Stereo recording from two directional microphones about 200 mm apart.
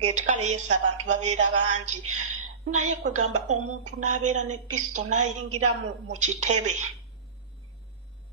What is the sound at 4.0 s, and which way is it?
Speech, 40° right (ahead or behind).